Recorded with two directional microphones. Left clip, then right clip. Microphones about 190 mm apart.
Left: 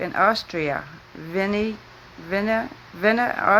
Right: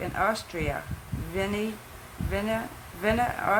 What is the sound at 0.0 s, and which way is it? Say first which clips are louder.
Speech: left 7 dB; 35° left (ahead or behind).